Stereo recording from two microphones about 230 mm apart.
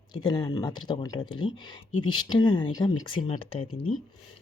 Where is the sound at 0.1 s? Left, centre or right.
Centre.